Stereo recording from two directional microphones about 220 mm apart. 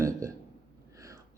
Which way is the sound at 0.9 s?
15° right (ahead or behind).